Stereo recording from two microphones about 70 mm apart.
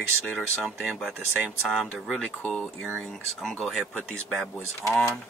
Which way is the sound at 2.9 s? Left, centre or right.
Centre.